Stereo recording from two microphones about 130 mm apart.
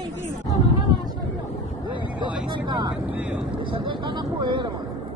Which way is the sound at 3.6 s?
40° right (ahead or behind).